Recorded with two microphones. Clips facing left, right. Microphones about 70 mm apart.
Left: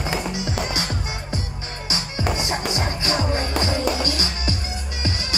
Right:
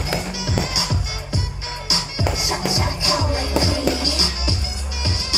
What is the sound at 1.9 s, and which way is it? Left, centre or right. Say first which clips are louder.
Music: even; left.